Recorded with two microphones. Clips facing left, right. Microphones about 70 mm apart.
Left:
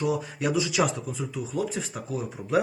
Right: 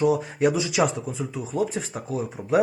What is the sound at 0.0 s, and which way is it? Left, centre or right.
Speech, right.